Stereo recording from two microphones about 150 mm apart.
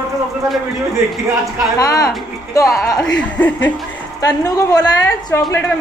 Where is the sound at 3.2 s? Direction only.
10° left (ahead or behind).